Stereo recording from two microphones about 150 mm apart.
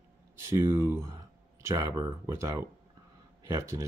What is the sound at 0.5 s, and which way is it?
Speech, 15° right (ahead or behind).